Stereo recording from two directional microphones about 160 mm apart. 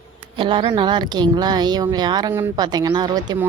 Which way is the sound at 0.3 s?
30° right (ahead or behind).